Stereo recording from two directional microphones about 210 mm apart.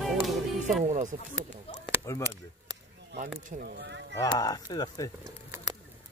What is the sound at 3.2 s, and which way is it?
Speech, 40° right (ahead or behind).